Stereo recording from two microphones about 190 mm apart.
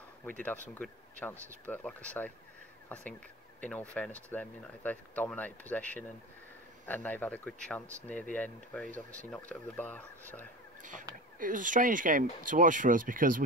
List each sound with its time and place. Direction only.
0.2 s speech: 10° left (ahead or behind)
3.9 s speech: 5° left (ahead or behind)
6.9 s speech: 10° left (ahead or behind)
10.8 s speech: 45° right (ahead or behind)